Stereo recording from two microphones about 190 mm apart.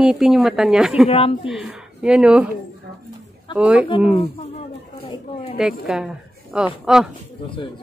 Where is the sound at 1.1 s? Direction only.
30° left (ahead or behind).